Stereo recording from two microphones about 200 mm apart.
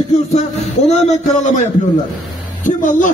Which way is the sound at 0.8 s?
35° left (ahead or behind).